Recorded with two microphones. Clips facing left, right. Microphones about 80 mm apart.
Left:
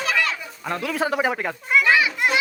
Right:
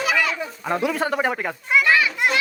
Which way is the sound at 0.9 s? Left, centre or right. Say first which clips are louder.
Even; centre.